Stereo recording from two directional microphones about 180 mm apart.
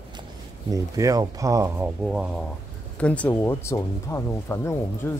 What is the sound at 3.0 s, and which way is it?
Speech, 5° left (ahead or behind).